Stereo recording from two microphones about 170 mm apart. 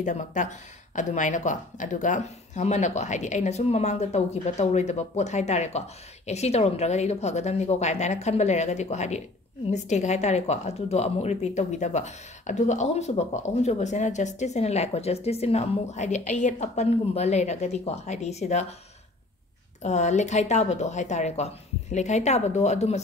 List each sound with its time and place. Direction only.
0.0 s speech: 45° left (ahead or behind)
19.8 s speech: 45° left (ahead or behind)